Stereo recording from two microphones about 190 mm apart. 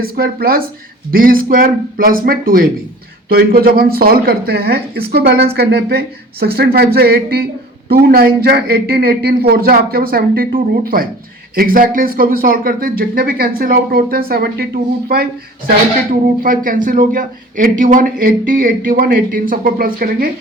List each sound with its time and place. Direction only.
0.0 s a man's voice: 50° right (ahead or behind)